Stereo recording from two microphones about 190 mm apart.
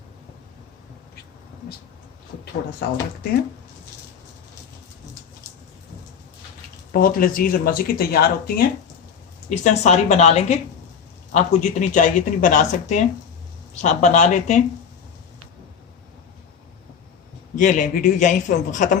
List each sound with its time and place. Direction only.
6.9 s speech: 50° left (ahead or behind)
9.5 s a woman's voice: 40° left (ahead or behind)
17.6 s a woman's voice: 45° left (ahead or behind)